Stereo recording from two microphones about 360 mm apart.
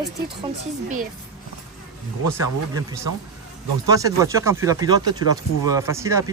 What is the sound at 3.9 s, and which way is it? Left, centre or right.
Speech, centre.